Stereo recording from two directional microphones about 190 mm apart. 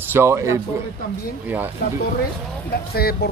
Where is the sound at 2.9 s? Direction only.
55° left (ahead or behind).